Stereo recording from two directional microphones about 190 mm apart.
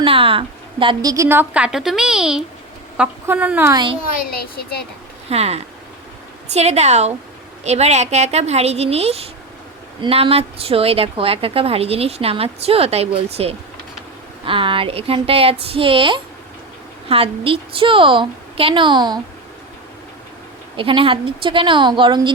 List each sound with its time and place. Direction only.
0.0 s a woman's voice: 30° right (ahead or behind); by 3.8 s 10° right (ahead or behind)
4.2 s a child's voice: 50° left (ahead or behind)
5.3 s a woman's voice: 35° right (ahead or behind)
20.7 s a woman's voice: 30° right (ahead or behind)